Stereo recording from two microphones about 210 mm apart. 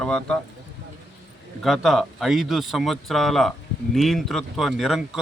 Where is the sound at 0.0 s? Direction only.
5° left (ahead or behind).